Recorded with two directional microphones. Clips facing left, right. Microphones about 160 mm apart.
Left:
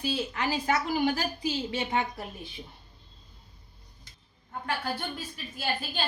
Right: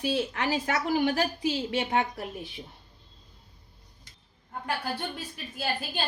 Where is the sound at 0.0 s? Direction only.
70° right (ahead or behind).